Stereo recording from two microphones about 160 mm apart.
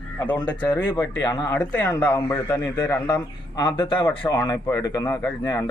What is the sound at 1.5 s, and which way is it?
Speech, 10° left (ahead or behind).